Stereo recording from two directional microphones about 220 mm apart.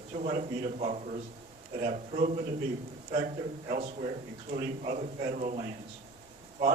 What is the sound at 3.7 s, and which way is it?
A man's voice, 35° right (ahead or behind).